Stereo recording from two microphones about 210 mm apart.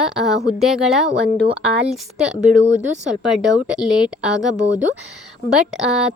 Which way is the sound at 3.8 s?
5° right (ahead or behind).